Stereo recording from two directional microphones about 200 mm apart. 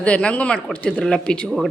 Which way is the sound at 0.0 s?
5° left (ahead or behind).